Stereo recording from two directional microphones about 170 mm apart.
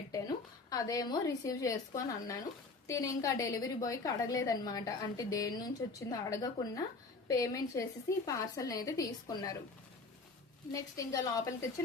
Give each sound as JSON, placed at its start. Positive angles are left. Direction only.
{"t": 0.1, "sound": "a woman's voice", "side_deg": 20}
{"t": 10.7, "sound": "a woman's voice", "side_deg": 20}